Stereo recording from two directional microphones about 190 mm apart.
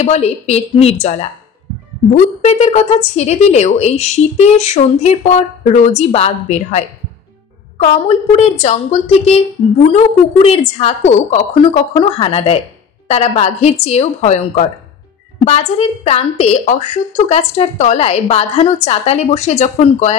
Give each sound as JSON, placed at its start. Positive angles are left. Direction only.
{"t": 0.0, "sound": "a woman's voice", "side_deg": 35}
{"t": 7.8, "sound": "a woman's voice", "side_deg": 35}